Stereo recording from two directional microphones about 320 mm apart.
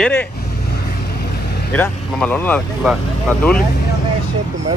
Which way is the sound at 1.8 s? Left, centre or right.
Centre.